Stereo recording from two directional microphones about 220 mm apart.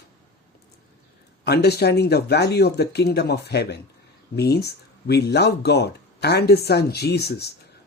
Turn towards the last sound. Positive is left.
turn(degrees=45)  # may be behind; listen again after turning